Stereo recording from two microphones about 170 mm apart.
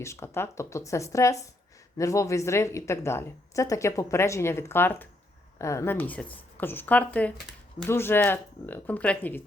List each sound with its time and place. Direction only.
0.0 s a woman's voice: 15° left (ahead or behind)